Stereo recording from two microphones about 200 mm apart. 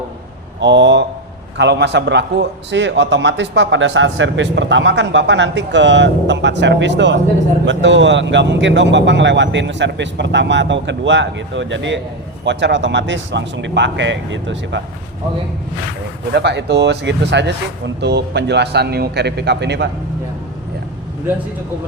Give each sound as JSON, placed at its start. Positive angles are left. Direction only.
{"t": 0.6, "sound": "a man's voice", "side_deg": -60}
{"t": 16.3, "sound": "a man's voice", "side_deg": -60}